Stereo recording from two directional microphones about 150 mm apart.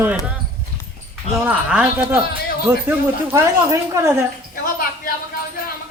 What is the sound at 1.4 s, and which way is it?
Speech, 10° right (ahead or behind).